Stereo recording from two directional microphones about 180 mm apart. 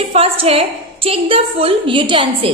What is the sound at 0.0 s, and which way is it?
A woman's voice, 35° right (ahead or behind).